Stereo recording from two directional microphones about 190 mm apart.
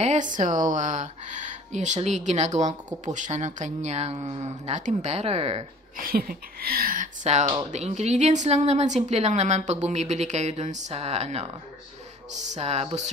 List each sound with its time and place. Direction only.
0.0 s a woman's voice: 40° right (ahead or behind)
5.9 s a woman's voice: 50° right (ahead or behind)